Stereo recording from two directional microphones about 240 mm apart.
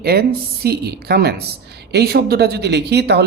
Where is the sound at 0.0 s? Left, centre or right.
Right.